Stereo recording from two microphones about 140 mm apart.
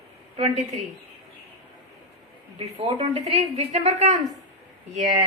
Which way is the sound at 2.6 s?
45° right (ahead or behind).